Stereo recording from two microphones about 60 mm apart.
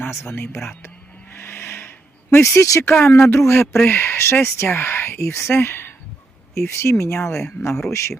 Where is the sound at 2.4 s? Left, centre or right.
Left.